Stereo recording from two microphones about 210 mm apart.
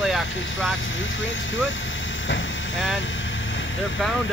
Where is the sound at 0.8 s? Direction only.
65° left (ahead or behind).